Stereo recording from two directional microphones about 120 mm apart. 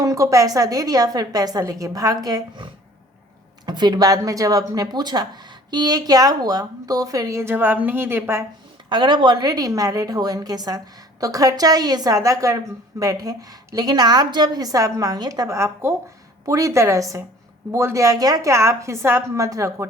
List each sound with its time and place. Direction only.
0.0 s a woman's voice: 25° right (ahead or behind)
3.7 s speech: 35° right (ahead or behind); by 8.4 s 20° right (ahead or behind)
8.9 s a woman's voice: 40° right (ahead or behind)